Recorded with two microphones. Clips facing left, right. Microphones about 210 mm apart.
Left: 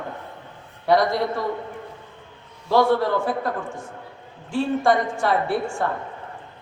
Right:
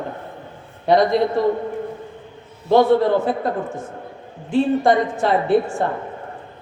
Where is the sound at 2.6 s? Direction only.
20° right (ahead or behind).